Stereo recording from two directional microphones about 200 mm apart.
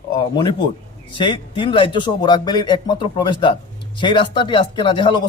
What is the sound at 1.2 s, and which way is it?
Speech, 25° left (ahead or behind).